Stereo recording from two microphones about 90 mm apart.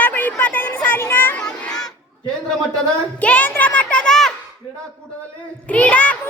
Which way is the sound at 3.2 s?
15° left (ahead or behind).